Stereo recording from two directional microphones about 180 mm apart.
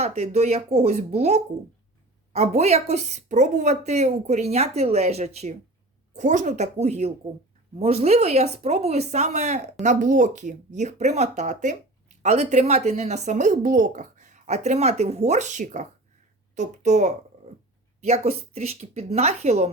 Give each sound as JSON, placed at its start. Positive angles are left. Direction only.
{"t": 0.0, "sound": "speech", "side_deg": -35}